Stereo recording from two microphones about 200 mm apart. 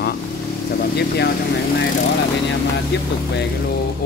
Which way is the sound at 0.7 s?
55° left (ahead or behind).